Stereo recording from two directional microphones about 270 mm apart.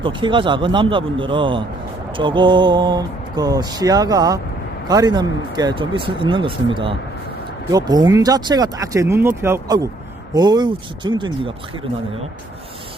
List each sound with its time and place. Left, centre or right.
0.0 s speech: centre